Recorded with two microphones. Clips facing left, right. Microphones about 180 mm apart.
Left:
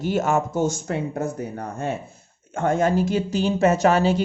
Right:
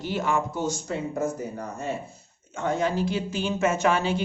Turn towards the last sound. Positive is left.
turn(degrees=40)  # may be behind; listen again after turning